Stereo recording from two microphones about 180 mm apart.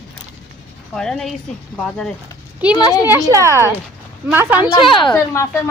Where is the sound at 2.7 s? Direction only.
20° left (ahead or behind).